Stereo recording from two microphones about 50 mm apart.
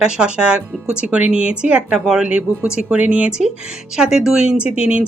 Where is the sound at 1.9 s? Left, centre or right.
Centre.